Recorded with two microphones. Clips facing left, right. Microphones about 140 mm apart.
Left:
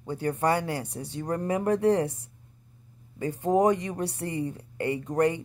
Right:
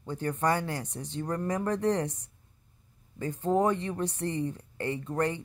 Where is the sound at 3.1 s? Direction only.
10° left (ahead or behind).